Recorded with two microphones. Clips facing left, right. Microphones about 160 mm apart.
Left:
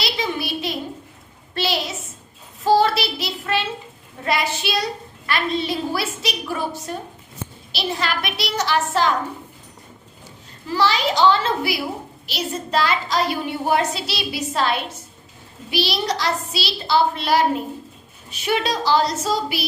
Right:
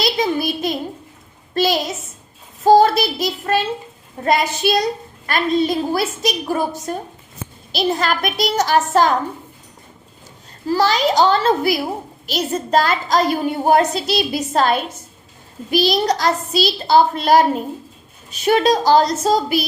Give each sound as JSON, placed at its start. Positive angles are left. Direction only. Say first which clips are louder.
{"t": 0.0, "sound": "a sound", "louder": "right 6 dB", "side_deg": -45}
{"t": 1.5, "sound": "a child's voice", "louder": "right 6 dB", "side_deg": -45}
{"t": 10.7, "sound": "a child's voice", "louder": "right 4 dB", "side_deg": -45}